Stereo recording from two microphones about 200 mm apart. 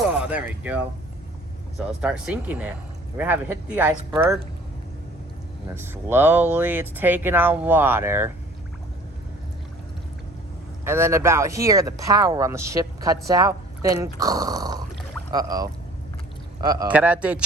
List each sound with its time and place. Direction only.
0.0 s a sound: 5° right (ahead or behind)
2.0 s speech: 5° right (ahead or behind)
5.6 s speech: 10° right (ahead or behind)
10.8 s speech: 15° right (ahead or behind)
16.9 s speech: 5° right (ahead or behind)